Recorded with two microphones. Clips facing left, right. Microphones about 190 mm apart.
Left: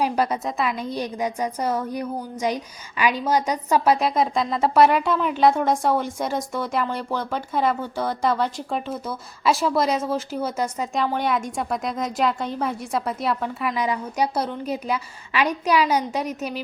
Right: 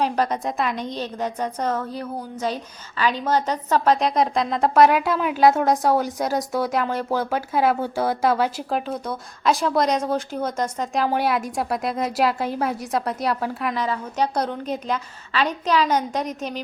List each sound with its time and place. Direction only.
0.0 s a woman's voice: 10° left (ahead or behind)
11.0 s a woman's voice: 5° right (ahead or behind)
13.7 s a woman's voice: 10° left (ahead or behind)